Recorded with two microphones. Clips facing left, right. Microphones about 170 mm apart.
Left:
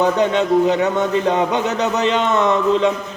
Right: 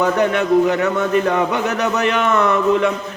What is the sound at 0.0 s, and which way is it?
A man's voice, 20° left (ahead or behind).